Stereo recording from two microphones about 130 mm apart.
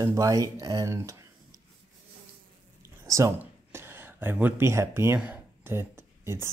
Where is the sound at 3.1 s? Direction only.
25° right (ahead or behind).